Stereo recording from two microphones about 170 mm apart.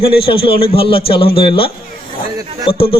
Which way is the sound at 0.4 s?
30° left (ahead or behind).